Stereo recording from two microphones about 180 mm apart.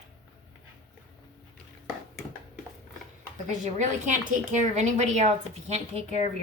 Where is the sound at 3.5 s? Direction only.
45° right (ahead or behind).